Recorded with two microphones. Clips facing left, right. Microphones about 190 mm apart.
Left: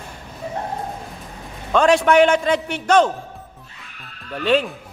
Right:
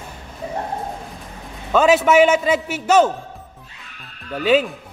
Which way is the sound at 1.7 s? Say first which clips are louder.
Right 1 dB; 5° right (ahead or behind).